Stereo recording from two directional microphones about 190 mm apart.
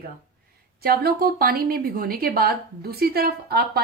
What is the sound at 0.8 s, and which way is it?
A woman's voice, 55° right (ahead or behind).